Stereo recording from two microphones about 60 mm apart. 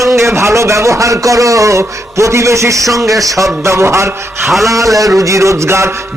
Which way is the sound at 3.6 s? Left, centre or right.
Right.